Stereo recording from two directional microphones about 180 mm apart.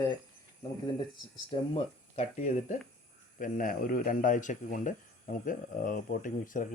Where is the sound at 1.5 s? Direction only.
35° left (ahead or behind).